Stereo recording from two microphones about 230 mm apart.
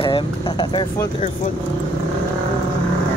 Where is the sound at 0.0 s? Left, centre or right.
Centre.